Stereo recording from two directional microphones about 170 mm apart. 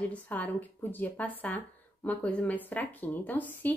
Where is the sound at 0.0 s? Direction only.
10° left (ahead or behind).